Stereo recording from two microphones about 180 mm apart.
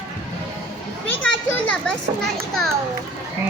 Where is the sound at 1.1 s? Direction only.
5° left (ahead or behind).